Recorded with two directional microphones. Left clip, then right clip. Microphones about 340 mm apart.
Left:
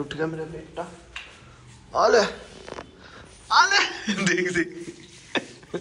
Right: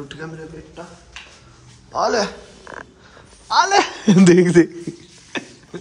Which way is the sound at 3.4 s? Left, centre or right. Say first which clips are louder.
Right 3 dB; centre.